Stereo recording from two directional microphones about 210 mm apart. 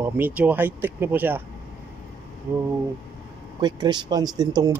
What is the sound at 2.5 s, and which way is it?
Speech, 10° right (ahead or behind).